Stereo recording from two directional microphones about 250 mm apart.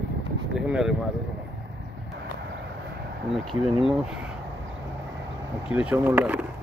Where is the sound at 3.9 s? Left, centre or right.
Centre.